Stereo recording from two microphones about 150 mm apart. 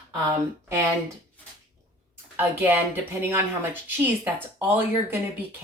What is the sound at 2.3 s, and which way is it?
Speech, 15° right (ahead or behind).